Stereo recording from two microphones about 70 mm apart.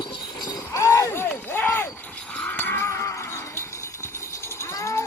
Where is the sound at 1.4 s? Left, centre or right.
Left.